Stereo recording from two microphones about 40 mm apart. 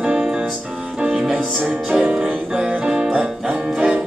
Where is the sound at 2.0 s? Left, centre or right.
Right.